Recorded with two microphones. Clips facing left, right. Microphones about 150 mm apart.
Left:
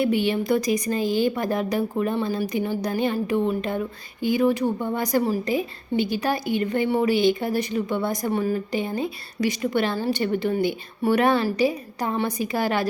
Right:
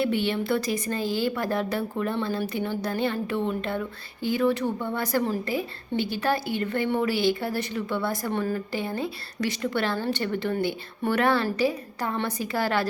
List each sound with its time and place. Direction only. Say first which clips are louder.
0.0 s speech: left 3 dB; 15° left (ahead or behind)